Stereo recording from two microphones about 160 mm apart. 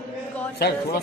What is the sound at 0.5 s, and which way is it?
Speech, 80° left.